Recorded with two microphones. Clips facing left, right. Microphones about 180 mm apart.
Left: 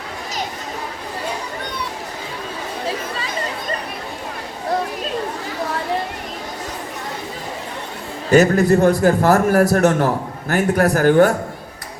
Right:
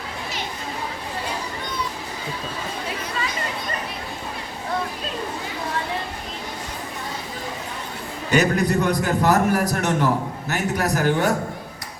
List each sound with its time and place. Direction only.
8.3 s speech: 45° left (ahead or behind)